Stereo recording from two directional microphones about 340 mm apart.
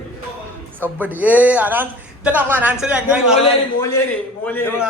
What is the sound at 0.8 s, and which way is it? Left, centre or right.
Speech, centre.